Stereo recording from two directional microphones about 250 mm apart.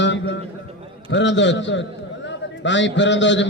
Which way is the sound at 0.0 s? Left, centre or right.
Left.